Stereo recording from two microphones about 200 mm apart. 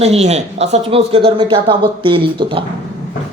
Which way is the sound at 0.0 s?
30° right (ahead or behind).